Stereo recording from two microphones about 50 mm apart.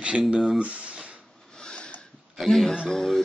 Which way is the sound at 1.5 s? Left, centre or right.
Centre.